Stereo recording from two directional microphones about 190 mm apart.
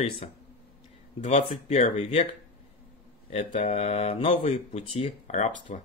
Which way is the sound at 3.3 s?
40° left (ahead or behind).